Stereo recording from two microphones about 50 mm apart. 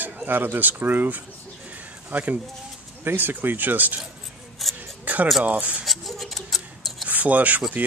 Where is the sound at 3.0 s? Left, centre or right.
Right.